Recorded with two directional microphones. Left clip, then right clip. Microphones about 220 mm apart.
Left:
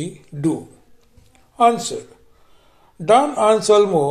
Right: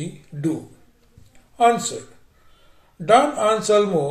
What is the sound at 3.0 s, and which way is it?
Speech, 25° left (ahead or behind).